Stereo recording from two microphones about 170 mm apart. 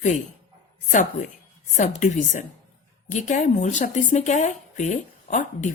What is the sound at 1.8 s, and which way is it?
Speech, 45° left (ahead or behind).